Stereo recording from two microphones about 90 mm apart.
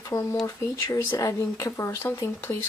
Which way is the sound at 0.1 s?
40° left (ahead or behind).